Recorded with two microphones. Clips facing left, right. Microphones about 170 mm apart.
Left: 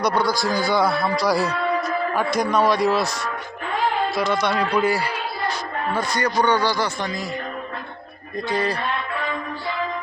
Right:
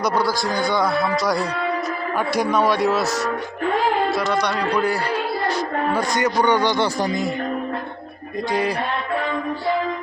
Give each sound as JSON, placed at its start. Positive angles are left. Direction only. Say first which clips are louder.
{"t": 0.3, "sound": "speech", "louder": "even", "side_deg": 5}
{"t": 4.2, "sound": "speech", "louder": "even", "side_deg": 10}
{"t": 6.1, "sound": "speech", "louder": "right 1 dB", "side_deg": -15}